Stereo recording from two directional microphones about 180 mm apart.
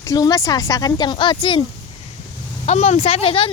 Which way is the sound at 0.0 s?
20° left (ahead or behind).